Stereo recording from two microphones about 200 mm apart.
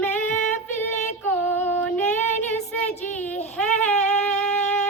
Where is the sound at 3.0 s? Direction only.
10° left (ahead or behind).